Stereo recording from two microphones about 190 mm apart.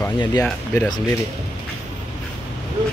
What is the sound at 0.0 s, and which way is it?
Speech, 20° left (ahead or behind).